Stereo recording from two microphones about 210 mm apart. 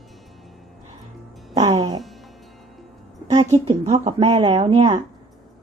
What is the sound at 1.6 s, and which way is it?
Music, 15° right (ahead or behind).